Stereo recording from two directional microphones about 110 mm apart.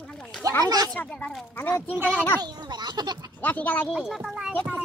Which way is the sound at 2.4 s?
40° right (ahead or behind).